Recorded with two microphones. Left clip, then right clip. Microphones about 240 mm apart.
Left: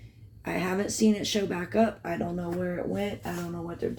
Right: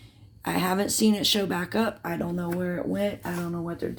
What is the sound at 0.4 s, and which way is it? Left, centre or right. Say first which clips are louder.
Speech: right 4 dB; right.